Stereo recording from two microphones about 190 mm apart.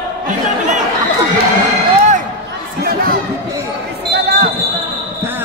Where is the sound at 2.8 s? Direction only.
50° right (ahead or behind).